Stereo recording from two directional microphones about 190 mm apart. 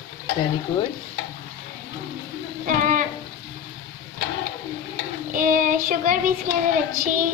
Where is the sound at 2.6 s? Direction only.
45° right (ahead or behind).